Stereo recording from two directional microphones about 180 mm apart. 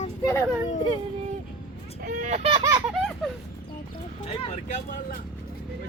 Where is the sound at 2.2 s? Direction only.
40° right (ahead or behind).